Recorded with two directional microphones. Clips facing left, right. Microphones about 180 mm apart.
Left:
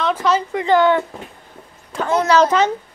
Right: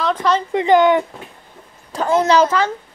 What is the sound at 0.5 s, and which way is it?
Speech, 20° right (ahead or behind).